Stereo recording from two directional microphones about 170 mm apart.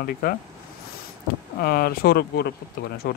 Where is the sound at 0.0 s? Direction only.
60° left (ahead or behind).